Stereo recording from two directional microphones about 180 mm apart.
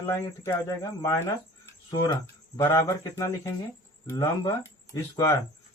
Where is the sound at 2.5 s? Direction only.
15° left (ahead or behind).